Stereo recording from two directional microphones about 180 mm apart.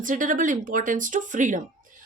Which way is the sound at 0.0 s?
45° right (ahead or behind).